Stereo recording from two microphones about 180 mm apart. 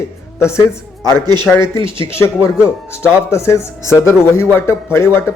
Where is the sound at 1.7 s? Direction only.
30° right (ahead or behind).